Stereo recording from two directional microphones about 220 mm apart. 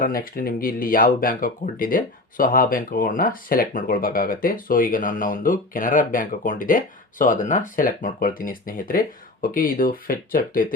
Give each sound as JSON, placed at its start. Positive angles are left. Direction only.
{"t": 0.0, "sound": "speech", "side_deg": 40}